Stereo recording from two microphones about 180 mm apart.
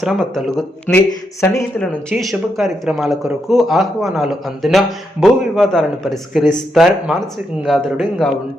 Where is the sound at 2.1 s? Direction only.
Centre (ahead or behind).